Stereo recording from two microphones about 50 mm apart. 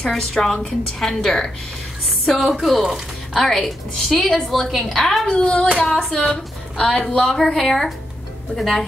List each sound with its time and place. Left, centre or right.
0.1 s a woman's voice: centre
3.3 s a woman's voice: centre
5.3 s hands: left
5.9 s a woman's voice: centre
6.8 s a woman's voice: centre